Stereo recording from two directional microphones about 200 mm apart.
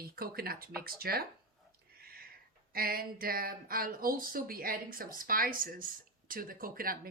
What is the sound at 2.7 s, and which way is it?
Speech, 50° right (ahead or behind).